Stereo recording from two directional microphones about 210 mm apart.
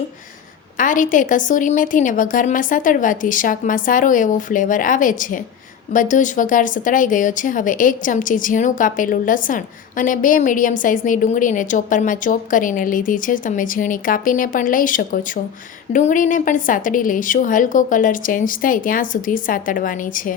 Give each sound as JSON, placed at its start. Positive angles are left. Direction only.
{"t": 0.8, "sound": "speech", "side_deg": 40}